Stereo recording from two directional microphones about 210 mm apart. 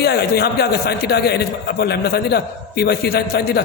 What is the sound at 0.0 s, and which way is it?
A man's voice, 50° left (ahead or behind).